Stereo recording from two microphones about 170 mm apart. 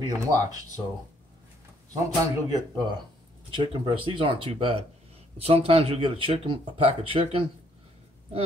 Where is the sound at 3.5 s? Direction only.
30° right (ahead or behind).